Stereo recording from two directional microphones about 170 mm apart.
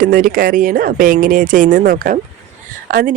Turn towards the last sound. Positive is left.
turn(degrees=-55)  # may be behind; listen again after turning